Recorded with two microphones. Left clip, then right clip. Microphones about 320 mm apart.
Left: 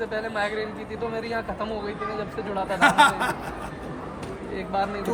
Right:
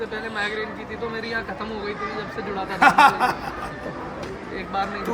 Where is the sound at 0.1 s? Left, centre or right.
Centre.